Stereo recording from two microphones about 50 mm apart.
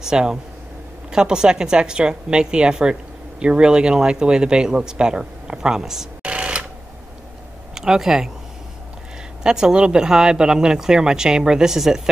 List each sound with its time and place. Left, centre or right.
0.0 s a woman's voice: centre
6.2 s a sound: right
7.7 s speech: centre
9.4 s a woman's voice: centre